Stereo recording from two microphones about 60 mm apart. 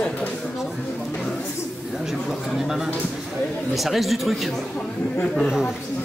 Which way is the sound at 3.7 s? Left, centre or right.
Centre.